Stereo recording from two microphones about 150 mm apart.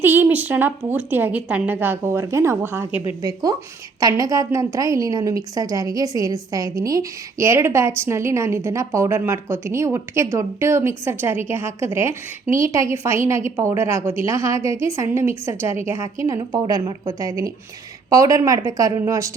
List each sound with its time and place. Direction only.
0.0 s a woman's voice: 15° right (ahead or behind)
3.2 s a woman's voice: 25° right (ahead or behind)